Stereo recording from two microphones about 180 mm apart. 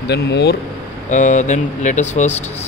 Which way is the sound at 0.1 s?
70° left (ahead or behind).